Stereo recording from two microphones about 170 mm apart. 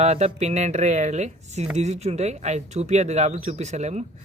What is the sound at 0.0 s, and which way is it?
Speech, 40° right (ahead or behind).